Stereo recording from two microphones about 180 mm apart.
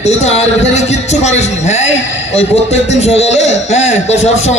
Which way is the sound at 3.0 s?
35° left (ahead or behind).